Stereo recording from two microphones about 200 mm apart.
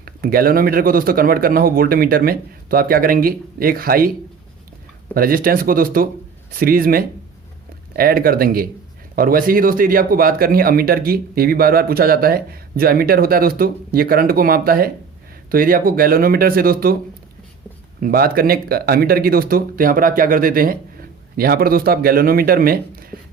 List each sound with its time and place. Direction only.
0.0 s speech: 50° right (ahead or behind)
5.1 s speech: 45° right (ahead or behind)
18.0 s speech: 50° right (ahead or behind)